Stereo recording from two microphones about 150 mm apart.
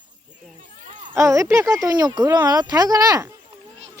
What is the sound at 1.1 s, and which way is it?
Speech, 20° right (ahead or behind).